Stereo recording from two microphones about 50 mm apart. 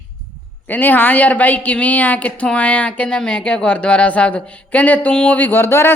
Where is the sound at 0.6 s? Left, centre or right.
Left.